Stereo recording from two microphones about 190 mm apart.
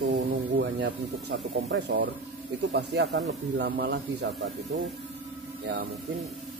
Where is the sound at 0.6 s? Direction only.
65° right (ahead or behind).